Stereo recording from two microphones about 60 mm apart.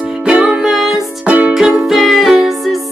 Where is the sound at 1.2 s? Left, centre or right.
Right.